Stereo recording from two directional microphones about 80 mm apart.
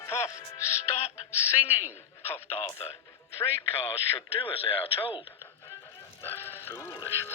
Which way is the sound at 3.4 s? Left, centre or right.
Left.